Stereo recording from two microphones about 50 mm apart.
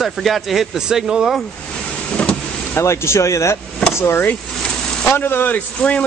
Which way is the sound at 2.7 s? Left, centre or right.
Left.